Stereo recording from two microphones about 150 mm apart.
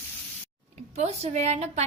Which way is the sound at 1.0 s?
50° right (ahead or behind).